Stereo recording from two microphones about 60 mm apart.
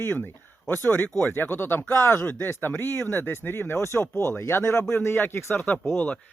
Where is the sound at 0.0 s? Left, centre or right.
Left.